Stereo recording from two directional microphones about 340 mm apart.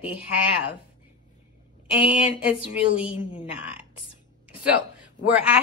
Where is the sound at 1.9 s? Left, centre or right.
Centre.